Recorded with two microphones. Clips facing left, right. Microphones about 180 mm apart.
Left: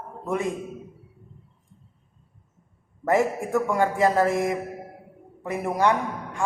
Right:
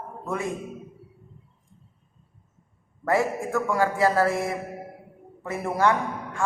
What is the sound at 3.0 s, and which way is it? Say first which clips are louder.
A man's voice: left 2 dB; 20° left (ahead or behind).